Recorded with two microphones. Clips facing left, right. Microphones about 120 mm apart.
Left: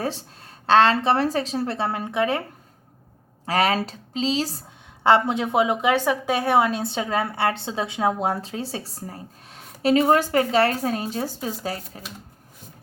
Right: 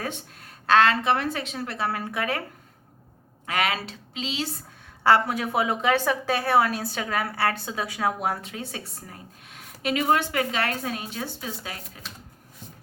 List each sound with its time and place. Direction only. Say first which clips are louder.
0.0 s a woman's voice: left 5 dB; 30° left (ahead or behind)
3.4 s a woman's voice: left 5 dB; 35° left (ahead or behind)
5.0 s a woman's voice: left 2 dB; 20° left (ahead or behind)